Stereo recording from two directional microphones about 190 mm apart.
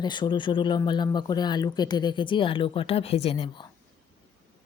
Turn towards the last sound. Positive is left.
turn(degrees=30)  # may be behind; listen again after turning